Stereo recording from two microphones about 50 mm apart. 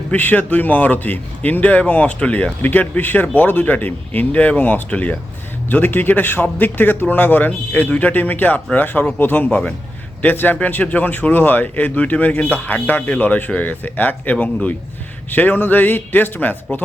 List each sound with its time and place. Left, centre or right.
0.2 s a man's voice: left
2.6 s a man's voice: left
5.6 s a man's voice: left